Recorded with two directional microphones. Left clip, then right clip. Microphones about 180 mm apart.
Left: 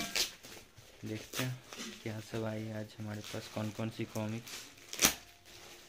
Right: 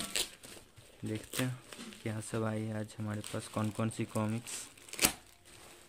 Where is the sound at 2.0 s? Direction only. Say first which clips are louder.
Right 4 dB; 60° right (ahead or behind).